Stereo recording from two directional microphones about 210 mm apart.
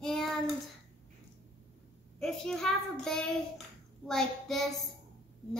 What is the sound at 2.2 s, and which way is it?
Child singing, centre (ahead or behind).